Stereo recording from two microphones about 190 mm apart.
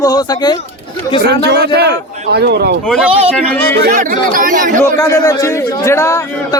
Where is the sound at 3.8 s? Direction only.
40° right (ahead or behind).